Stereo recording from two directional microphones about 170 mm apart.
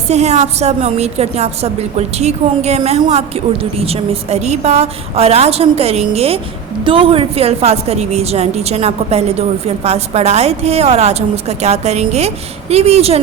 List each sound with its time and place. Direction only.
0.1 s a woman's voice: 40° right (ahead or behind)